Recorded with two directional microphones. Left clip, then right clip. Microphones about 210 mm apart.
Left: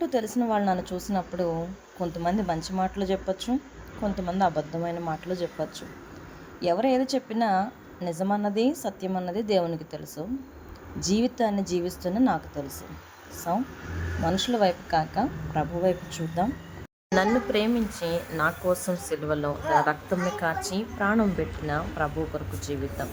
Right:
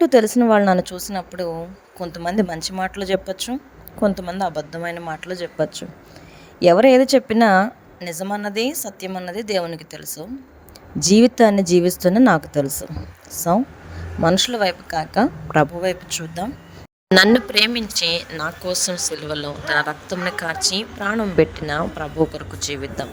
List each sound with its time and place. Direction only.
0.0 s a woman's voice: 50° right (ahead or behind)
18.3 s a woman's voice: centre (ahead or behind)
18.7 s a woman's voice: 40° right (ahead or behind)
19.8 s a woman's voice: centre (ahead or behind)
20.5 s a woman's voice: 40° right (ahead or behind)